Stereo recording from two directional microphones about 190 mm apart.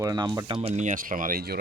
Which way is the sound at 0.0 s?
20° right (ahead or behind).